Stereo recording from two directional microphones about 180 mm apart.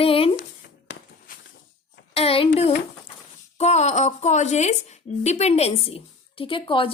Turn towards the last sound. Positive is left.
turn(degrees=30)  # may be behind; listen again after turning